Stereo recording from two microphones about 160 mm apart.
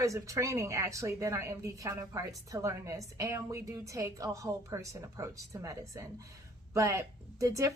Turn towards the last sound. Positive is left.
turn(degrees=-20)  # may be behind; listen again after turning